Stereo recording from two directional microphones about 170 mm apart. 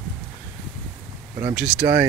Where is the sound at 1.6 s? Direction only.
5° right (ahead or behind).